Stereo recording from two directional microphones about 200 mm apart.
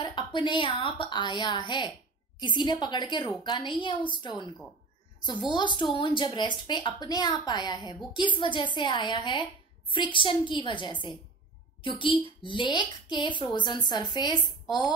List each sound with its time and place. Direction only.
0.0 s a woman's voice: 25° left (ahead or behind)
5.9 s a woman's voice: 25° left (ahead or behind)